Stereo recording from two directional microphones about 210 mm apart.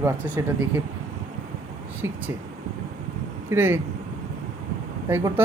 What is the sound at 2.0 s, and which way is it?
Speech, 10° right (ahead or behind).